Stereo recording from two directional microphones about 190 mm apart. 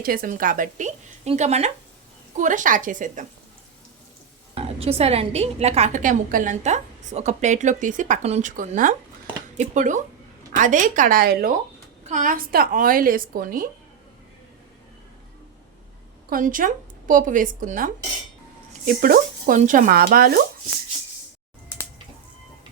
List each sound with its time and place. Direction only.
0.0 s a woman's voice: 50° right (ahead or behind)
4.5 s a woman's voice: 30° right (ahead or behind); by 11.5 s 50° right (ahead or behind)
12.0 s a woman's voice: 40° right (ahead or behind)
16.3 s a woman's voice: 45° right (ahead or behind)